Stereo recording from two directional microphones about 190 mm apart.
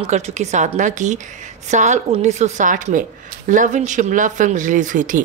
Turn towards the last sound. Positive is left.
turn(degrees=-45)  # may be behind; listen again after turning